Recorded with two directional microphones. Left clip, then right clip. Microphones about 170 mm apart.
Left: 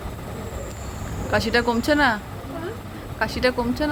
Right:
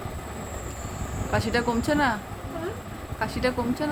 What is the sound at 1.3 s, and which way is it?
Speech, 10° left (ahead or behind).